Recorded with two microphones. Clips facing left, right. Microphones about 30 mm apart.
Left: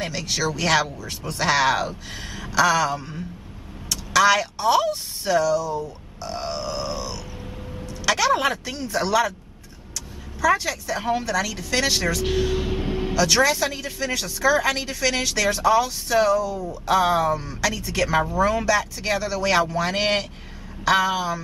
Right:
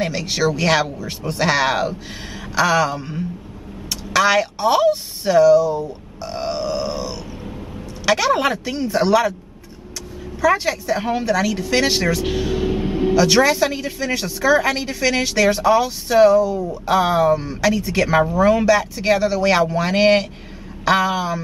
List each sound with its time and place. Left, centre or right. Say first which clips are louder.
0.0 s a woman's voice: right 5 dB; centre
10.4 s speech: right 3 dB; centre
12.3 s a sound: right 3 dB; centre
13.1 s speech: right 4 dB; centre
17.4 s speech: right 6 dB; right